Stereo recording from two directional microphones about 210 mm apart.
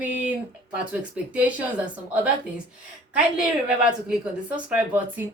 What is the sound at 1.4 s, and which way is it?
Speech, 5° right (ahead or behind).